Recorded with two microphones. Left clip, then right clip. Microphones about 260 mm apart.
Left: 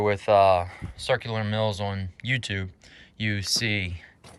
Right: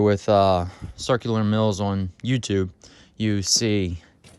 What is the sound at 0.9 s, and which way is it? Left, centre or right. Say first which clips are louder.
Speech: right 3 dB; centre.